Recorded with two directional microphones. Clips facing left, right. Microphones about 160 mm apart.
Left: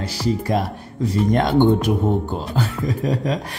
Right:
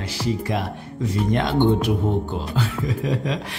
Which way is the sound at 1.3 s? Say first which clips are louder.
Left 3 dB; 45° left (ahead or behind).